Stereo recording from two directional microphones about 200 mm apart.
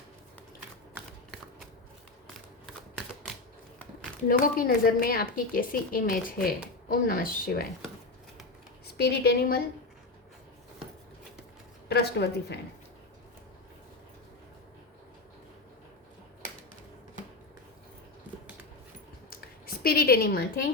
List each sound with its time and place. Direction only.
4.3 s speech: 45° left (ahead or behind)
9.0 s speech: 55° left (ahead or behind)
11.9 s speech: 55° left (ahead or behind)
19.3 s a sound: 45° left (ahead or behind)